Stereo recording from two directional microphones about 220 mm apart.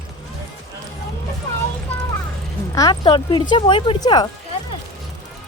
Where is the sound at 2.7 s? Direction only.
15° left (ahead or behind).